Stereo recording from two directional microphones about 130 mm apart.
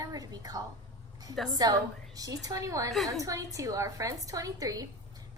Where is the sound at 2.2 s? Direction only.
25° right (ahead or behind).